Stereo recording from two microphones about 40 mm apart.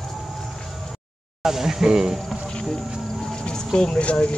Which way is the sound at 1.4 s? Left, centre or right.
Centre.